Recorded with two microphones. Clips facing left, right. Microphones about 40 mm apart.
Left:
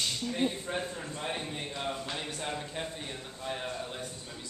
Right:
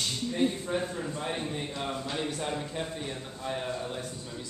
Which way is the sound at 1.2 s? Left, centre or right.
Centre.